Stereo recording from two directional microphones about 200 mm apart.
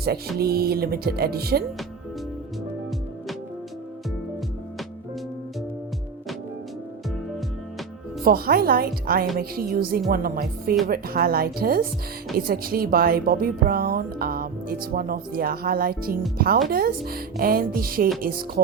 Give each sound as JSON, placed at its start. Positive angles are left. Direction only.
{"t": 0.0, "sound": "speech", "side_deg": -50}
{"t": 8.2, "sound": "speech", "side_deg": -50}